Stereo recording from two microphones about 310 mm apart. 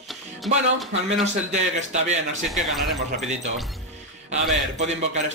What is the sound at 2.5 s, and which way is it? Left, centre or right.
Speech, centre.